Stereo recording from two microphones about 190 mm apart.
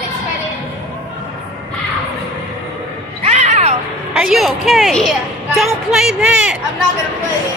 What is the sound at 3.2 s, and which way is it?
Cat, 35° right (ahead or behind).